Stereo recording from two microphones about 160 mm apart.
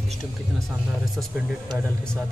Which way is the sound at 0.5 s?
Centre (ahead or behind).